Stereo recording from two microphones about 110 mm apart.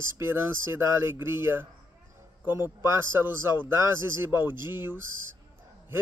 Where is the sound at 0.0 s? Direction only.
20° right (ahead or behind).